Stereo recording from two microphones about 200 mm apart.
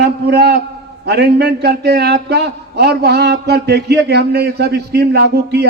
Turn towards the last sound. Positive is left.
turn(degrees=-55)  # may be behind; listen again after turning